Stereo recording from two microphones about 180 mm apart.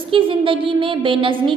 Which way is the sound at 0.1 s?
30° right (ahead or behind).